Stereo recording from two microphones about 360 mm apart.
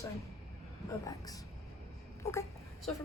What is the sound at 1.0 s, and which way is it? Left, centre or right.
Speech, centre.